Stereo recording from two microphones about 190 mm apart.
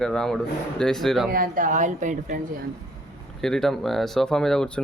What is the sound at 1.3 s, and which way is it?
A woman's voice, 45° right (ahead or behind).